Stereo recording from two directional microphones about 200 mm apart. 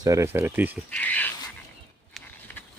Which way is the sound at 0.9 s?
5° left (ahead or behind).